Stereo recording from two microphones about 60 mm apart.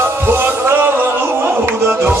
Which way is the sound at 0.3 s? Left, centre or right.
Right.